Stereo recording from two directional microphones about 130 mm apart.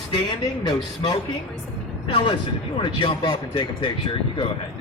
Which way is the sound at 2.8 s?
40° left (ahead or behind).